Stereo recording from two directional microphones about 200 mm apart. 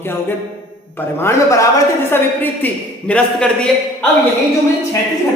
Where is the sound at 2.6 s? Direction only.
5° left (ahead or behind).